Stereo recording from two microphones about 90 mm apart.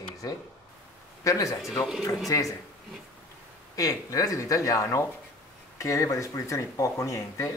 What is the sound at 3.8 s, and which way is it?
Speech, 40° left (ahead or behind).